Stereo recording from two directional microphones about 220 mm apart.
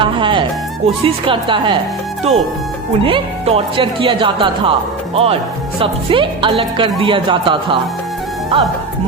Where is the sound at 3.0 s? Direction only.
25° right (ahead or behind).